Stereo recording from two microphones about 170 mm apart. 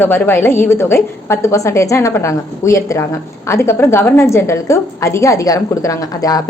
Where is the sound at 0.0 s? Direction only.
15° left (ahead or behind).